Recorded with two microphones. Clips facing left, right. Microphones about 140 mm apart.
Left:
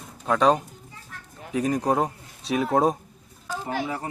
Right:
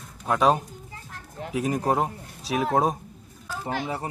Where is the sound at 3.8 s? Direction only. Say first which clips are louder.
Even; 25° right (ahead or behind).